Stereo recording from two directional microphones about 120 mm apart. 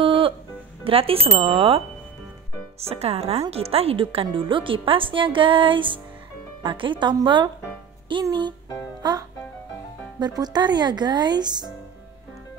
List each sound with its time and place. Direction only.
0.0 s music: 50° right (ahead or behind)
0.8 s speech: 50° right (ahead or behind)
2.8 s speech: 60° right (ahead or behind); by 8.5 s 40° right (ahead or behind)
10.1 s speech: 35° right (ahead or behind)